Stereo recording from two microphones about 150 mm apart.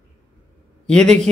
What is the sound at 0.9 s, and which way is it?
Speech, 5° left (ahead or behind).